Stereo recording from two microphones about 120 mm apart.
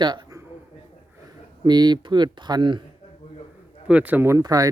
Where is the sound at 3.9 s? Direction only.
15° right (ahead or behind).